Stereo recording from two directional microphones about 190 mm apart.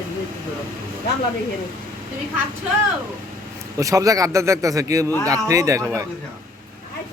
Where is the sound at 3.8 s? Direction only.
15° right (ahead or behind).